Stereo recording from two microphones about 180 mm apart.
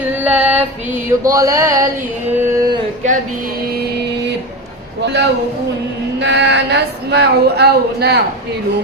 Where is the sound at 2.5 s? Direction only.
20° right (ahead or behind).